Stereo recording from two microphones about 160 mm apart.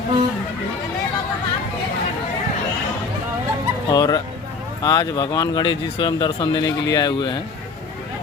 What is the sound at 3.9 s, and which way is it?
Speech, 25° left (ahead or behind).